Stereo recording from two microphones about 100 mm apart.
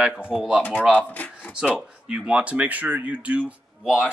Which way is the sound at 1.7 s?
10° right (ahead or behind).